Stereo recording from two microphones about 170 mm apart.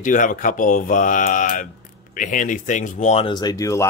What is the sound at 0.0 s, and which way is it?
Speech, 50° left (ahead or behind).